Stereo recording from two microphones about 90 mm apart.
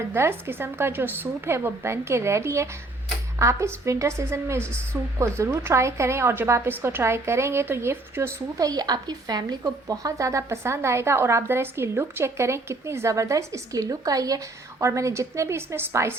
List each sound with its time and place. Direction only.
0.1 s a woman's voice: 25° right (ahead or behind)
8.5 s a woman's voice: 45° right (ahead or behind)